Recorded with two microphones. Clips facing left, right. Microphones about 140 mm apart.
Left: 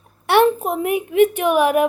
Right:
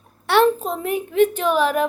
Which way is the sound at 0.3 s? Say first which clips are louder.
Left 2 dB; 15° left (ahead or behind).